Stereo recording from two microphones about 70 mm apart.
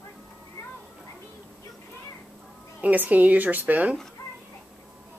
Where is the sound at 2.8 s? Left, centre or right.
Right.